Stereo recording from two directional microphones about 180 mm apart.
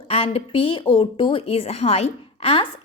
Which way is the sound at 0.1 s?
30° left (ahead or behind).